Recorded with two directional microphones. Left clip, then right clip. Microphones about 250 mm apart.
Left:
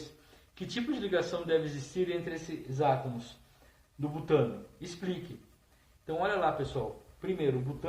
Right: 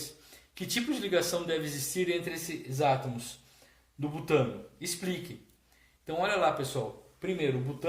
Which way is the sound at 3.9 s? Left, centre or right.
Right.